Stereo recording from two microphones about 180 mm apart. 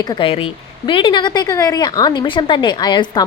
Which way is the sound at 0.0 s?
25° left (ahead or behind).